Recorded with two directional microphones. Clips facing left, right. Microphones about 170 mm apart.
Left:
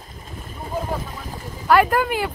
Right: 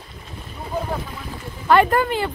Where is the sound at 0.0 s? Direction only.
45° left (ahead or behind).